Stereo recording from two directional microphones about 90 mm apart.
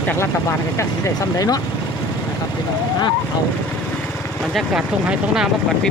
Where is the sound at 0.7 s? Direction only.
40° left (ahead or behind).